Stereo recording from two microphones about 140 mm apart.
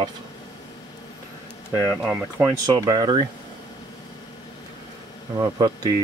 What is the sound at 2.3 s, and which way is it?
Speech, 25° right (ahead or behind).